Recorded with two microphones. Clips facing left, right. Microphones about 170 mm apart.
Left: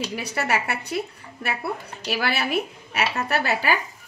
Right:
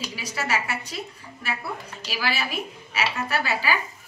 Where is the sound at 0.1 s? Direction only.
60° left (ahead or behind).